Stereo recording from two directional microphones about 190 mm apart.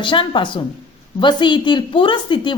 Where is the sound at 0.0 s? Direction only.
25° left (ahead or behind).